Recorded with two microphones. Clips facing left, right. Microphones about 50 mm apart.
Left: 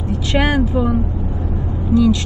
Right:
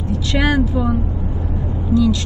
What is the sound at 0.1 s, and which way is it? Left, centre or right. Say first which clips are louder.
Speech: left 1 dB; left.